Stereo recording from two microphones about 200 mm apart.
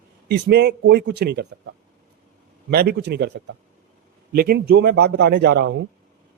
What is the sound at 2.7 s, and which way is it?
Speech, 50° right (ahead or behind).